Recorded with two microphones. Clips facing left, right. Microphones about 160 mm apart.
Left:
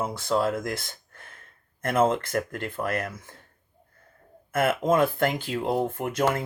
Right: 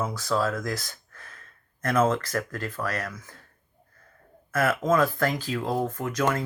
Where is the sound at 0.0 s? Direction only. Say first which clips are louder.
Left 1 dB; 25° left (ahead or behind).